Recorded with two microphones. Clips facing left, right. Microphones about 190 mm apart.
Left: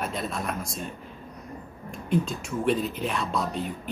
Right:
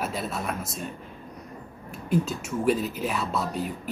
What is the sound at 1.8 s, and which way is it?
Speech, 5° right (ahead or behind).